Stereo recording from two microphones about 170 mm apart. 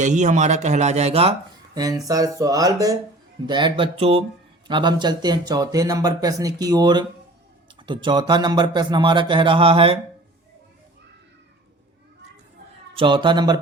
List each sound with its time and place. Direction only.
0.0 s speech: 45° right (ahead or behind)
2.0 s speech: 20° right (ahead or behind)
12.9 s speech: 30° right (ahead or behind)